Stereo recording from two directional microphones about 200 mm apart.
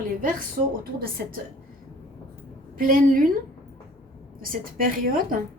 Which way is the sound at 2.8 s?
45° right (ahead or behind).